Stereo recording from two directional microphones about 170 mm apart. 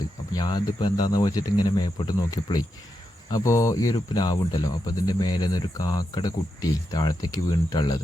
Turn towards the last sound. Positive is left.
turn(degrees=25)  # may be behind; listen again after turning